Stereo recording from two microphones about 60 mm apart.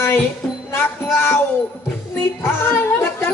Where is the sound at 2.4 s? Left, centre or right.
Left.